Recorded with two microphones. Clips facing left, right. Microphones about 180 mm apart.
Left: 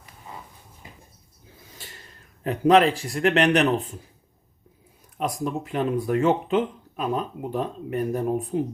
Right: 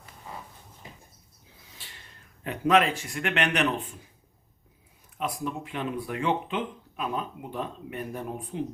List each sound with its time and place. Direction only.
1.7 s a sound: 45° left (ahead or behind)
2.4 s a man's voice: 35° left (ahead or behind)
5.1 s speech: 40° left (ahead or behind)